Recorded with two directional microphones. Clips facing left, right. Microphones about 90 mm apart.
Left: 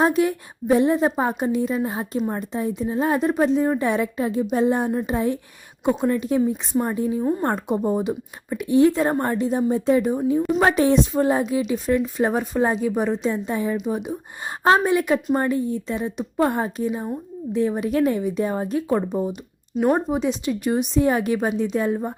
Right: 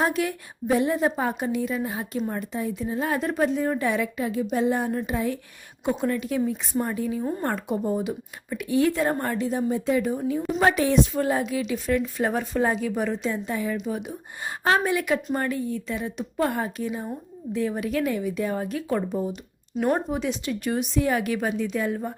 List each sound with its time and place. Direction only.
0.0 s a woman's voice: 25° left (ahead or behind)
19.3 s speech: 5° left (ahead or behind)
20.1 s a woman's voice: 20° left (ahead or behind)